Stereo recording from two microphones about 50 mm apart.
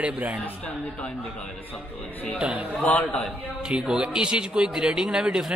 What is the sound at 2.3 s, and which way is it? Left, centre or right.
Speech, right.